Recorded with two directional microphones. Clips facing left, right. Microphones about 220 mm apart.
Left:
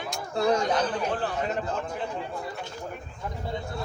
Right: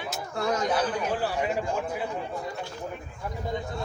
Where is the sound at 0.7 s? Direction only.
10° right (ahead or behind).